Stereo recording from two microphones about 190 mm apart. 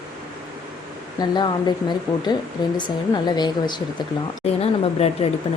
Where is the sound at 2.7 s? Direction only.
20° left (ahead or behind).